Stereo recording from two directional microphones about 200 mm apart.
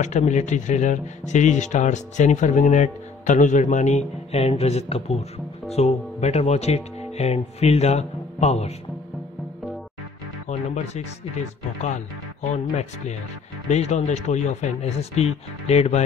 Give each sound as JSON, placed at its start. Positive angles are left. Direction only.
{"t": 0.0, "sound": "speech", "side_deg": 35}
{"t": 10.5, "sound": "music", "side_deg": 35}
{"t": 11.8, "sound": "speech", "side_deg": 35}